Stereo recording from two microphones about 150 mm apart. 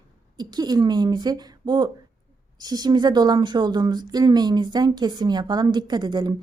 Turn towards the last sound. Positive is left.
turn(degrees=-30)  # may be behind; listen again after turning